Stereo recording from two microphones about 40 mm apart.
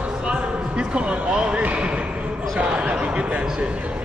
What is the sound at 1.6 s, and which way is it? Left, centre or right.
Basketball bounce, right.